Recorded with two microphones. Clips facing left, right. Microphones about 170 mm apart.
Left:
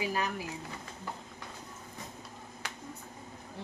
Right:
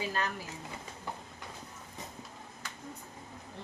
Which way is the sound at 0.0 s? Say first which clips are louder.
Left 2 dB; 15° left (ahead or behind).